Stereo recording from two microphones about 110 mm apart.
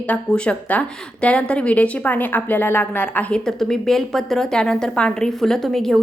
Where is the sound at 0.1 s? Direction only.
10° left (ahead or behind).